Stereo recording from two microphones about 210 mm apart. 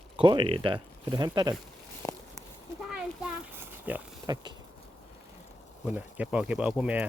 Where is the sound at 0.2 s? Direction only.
25° right (ahead or behind).